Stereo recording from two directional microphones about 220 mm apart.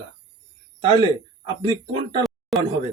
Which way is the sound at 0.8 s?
20° right (ahead or behind).